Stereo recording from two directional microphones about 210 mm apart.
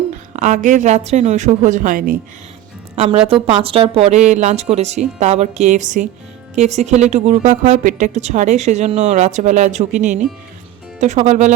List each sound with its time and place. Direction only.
0.3 s a woman's voice: 35° right (ahead or behind)
2.9 s a woman's voice: 30° right (ahead or behind)